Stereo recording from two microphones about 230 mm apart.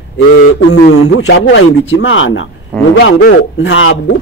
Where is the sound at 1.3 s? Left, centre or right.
Left.